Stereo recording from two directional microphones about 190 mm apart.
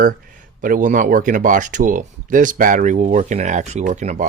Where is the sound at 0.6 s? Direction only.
45° right (ahead or behind).